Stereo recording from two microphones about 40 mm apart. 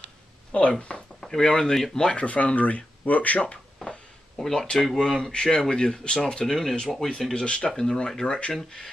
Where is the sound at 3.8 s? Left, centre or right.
Left.